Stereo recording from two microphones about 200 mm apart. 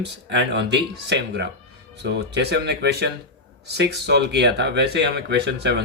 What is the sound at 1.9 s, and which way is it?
Speech, 55° right (ahead or behind).